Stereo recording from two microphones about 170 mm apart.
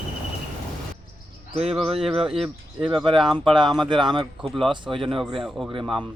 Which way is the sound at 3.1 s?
Centre (ahead or behind).